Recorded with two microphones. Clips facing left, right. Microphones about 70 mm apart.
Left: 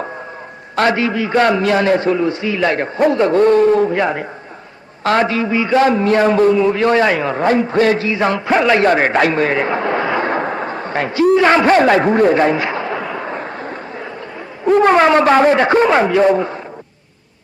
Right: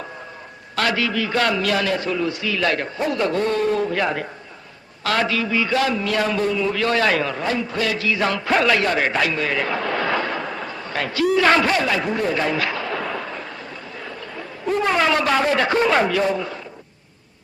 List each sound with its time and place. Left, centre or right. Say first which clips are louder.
0.8 s a man's voice: left 6 dB; left
7.3 s a man's voice: left 9 dB; left
8.8 s a man's voice: left 7 dB; left
10.2 s a sound: left 8 dB; left
11.3 s a man's voice: left 3 dB; left
11.7 s a man's voice: left 10 dB; left; by 13.2 s centre
13.2 s fireworks: left 7 dB; left
14.7 s a man's voice: left 9 dB; left